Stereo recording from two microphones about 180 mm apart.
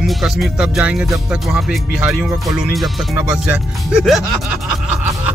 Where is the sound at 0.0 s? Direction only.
Centre (ahead or behind).